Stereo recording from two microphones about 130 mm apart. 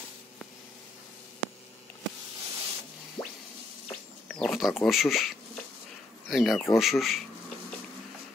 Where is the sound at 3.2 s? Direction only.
35° left (ahead or behind).